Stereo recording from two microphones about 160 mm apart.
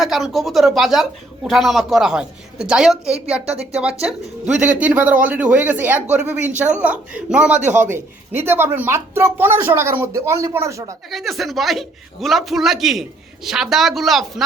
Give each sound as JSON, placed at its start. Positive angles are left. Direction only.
{"t": 0.0, "sound": "a man's voice", "side_deg": 0}
{"t": 3.4, "sound": "speech", "side_deg": -40}
{"t": 4.8, "sound": "speech", "side_deg": -10}
{"t": 11.1, "sound": "a man's voice", "side_deg": 0}